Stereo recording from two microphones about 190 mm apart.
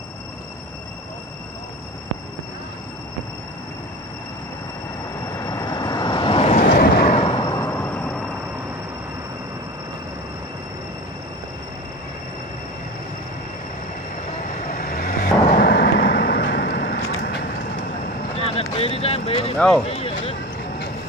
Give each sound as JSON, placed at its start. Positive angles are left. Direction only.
{"t": 5.4, "sound": "vehicle", "side_deg": 20}
{"t": 6.5, "sound": "vehicle", "side_deg": 50}
{"t": 7.2, "sound": "vehicle", "side_deg": 25}
{"t": 14.4, "sound": "vehicle", "side_deg": 45}
{"t": 18.3, "sound": "a sound", "side_deg": 30}